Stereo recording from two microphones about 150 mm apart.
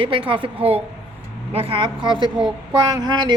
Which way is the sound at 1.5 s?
40° right (ahead or behind).